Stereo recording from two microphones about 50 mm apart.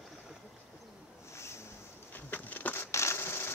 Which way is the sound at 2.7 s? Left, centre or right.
Left.